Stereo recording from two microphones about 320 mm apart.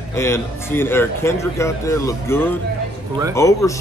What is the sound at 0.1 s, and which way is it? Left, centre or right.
A man's voice, centre.